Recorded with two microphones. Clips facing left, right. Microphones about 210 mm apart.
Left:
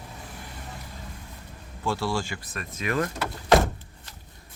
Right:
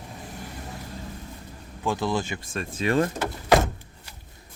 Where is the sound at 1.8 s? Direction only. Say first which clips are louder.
Right 2 dB; 20° right (ahead or behind).